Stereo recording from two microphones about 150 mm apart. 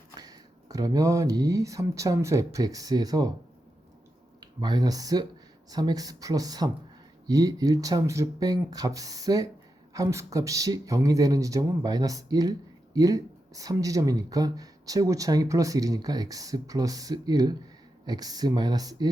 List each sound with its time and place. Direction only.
0.2 s speech: 25° right (ahead or behind)
4.4 s speech: 30° right (ahead or behind)